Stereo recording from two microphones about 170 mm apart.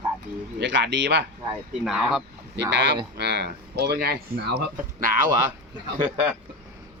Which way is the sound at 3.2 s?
80° right.